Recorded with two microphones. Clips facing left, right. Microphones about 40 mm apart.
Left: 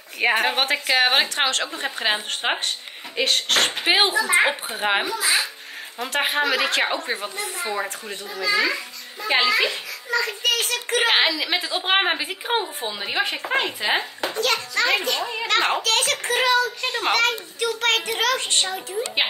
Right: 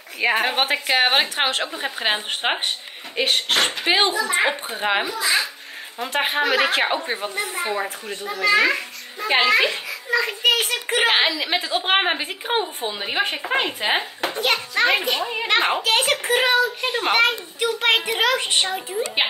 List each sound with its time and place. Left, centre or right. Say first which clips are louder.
0.3 s a woman's voice: right 1 dB; centre
1.7 s a woman's voice: right 1 dB; centre
3.8 s a woman's voice: even; centre
6.4 s speech: right 2 dB; centre
7.4 s a child's voice: right 3 dB; right
8.3 s a child's voice: right 4 dB; right
9.4 s a child's voice: right 4 dB; right
11.1 s a woman's voice: even; centre; by 16.3 s right
16.4 s a child's voice: even; right
17.1 s a child's voice: right 3 dB; right